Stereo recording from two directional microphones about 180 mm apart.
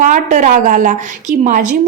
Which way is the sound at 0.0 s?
45° right (ahead or behind).